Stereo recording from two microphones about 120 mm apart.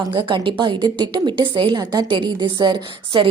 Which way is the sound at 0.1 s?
45° right (ahead or behind).